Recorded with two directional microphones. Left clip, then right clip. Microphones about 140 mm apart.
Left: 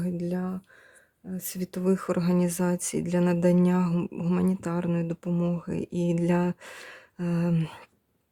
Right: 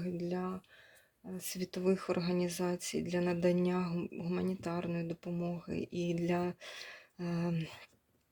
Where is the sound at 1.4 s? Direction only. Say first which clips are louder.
Left 5 dB; 55° left (ahead or behind).